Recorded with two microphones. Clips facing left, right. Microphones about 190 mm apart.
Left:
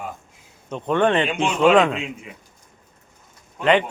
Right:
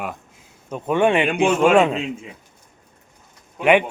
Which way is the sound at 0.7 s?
10° right (ahead or behind).